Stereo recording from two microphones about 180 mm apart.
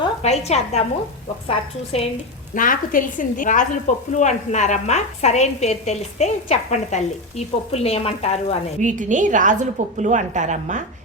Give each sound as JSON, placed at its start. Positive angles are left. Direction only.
{"t": 0.2, "sound": "a woman's voice", "side_deg": 35}
{"t": 2.6, "sound": "a woman's voice", "side_deg": 50}
{"t": 8.8, "sound": "a woman's voice", "side_deg": -45}